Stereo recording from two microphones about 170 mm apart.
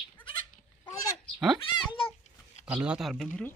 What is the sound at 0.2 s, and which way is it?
Goat, 10° left (ahead or behind).